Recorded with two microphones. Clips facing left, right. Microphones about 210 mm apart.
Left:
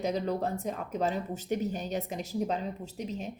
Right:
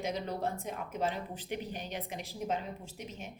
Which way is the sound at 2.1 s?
35° left (ahead or behind).